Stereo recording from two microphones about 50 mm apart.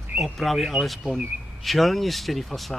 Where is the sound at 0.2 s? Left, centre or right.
Centre.